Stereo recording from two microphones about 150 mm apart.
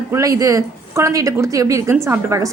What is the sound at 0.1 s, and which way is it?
Speech, 25° right (ahead or behind).